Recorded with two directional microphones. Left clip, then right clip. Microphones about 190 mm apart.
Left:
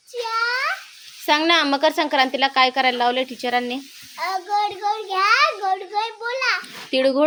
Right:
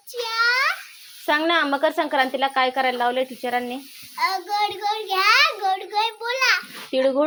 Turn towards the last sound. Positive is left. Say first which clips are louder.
# left 2 dB
turn(degrees=20)  # may be behind; listen again after turning